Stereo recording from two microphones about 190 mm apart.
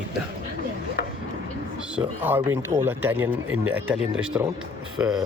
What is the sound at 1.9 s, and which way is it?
A man's voice, 10° right (ahead or behind).